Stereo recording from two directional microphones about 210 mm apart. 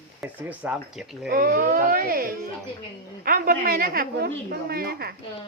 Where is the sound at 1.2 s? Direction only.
45° right (ahead or behind).